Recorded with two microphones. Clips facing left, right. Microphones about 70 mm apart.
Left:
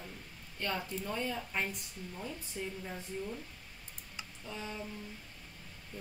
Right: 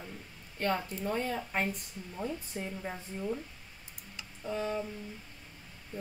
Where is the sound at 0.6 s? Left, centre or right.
Right.